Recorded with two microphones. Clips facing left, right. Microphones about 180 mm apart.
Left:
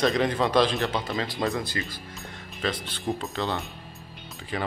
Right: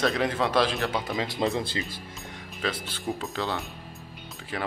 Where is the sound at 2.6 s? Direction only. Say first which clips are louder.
Left 1 dB; 5° right (ahead or behind).